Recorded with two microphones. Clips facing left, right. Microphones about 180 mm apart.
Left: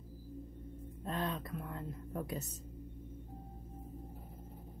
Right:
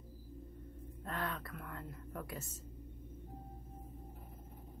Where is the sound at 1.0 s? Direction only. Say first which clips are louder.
Left 3 dB; 20° left (ahead or behind).